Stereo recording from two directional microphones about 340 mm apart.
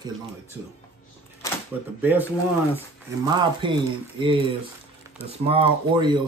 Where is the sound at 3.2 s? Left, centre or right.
Centre.